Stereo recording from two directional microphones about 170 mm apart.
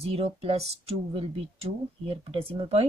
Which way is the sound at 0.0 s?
35° right (ahead or behind).